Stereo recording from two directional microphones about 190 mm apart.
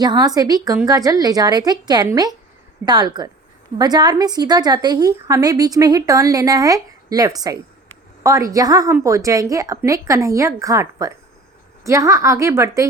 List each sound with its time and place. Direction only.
0.0 s a woman's voice: 20° right (ahead or behind)